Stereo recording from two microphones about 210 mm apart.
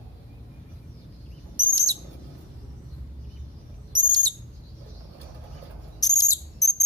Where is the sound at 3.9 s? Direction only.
20° right (ahead or behind).